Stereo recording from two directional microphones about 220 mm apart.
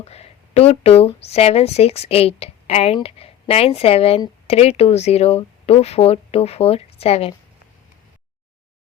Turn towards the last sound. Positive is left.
turn(degrees=25)  # may be behind; listen again after turning